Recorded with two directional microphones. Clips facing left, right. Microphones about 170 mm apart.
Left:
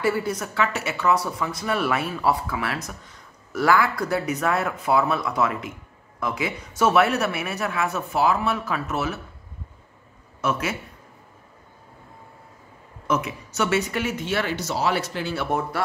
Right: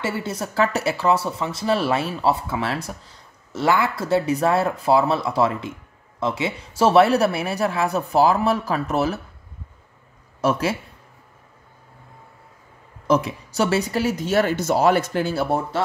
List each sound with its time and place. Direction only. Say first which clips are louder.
0.0 s speech: left 2 dB; 25° right (ahead or behind)
10.4 s speech: right 5 dB; 30° right (ahead or behind)
13.0 s speech: right 5 dB; 35° right (ahead or behind)